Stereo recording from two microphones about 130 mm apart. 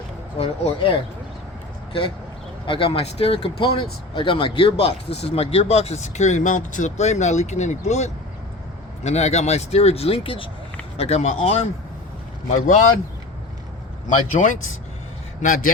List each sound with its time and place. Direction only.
0.3 s speech: 45° left (ahead or behind)
10.9 s speech: 55° left (ahead or behind)
12.5 s speech: 75° left (ahead or behind)
14.1 s speech: 75° left (ahead or behind)
15.4 s a man's voice: 85° left